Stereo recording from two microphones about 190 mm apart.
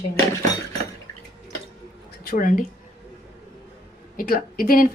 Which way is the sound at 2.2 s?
45° left (ahead or behind).